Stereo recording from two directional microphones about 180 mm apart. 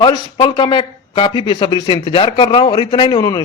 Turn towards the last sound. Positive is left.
turn(degrees=20)  # may be behind; listen again after turning